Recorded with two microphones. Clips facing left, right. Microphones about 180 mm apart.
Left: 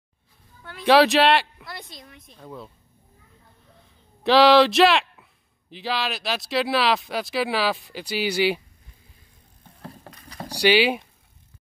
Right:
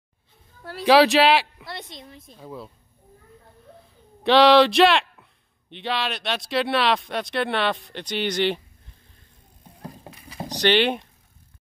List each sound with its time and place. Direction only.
0.6 s speech: 40° right (ahead or behind)
0.8 s speech: centre (ahead or behind)
1.7 s a woman's voice: 25° right (ahead or behind)
2.3 s speech: 5° right (ahead or behind)
4.2 s speech: centre (ahead or behind)
9.8 s vehicle: 15° right (ahead or behind)
10.5 s speech: 10° left (ahead or behind)